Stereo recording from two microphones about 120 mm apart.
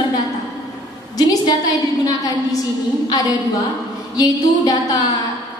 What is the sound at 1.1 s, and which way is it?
A woman's voice, 30° left (ahead or behind).